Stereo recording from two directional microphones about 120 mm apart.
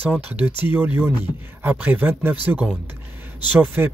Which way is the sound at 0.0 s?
10° right (ahead or behind).